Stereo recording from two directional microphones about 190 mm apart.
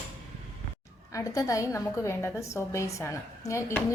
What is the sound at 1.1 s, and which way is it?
A woman's voice, 15° left (ahead or behind).